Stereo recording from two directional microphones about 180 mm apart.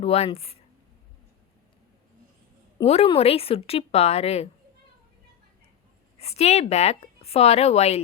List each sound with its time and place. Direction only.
0.0 s a woman's voice: 35° left (ahead or behind)
2.8 s a woman's voice: 35° left (ahead or behind)
6.1 s a woman's voice: 35° left (ahead or behind)